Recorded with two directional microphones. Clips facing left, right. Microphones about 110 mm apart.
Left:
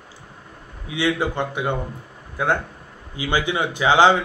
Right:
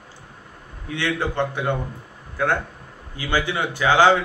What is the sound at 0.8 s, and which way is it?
A man's voice, 15° left (ahead or behind).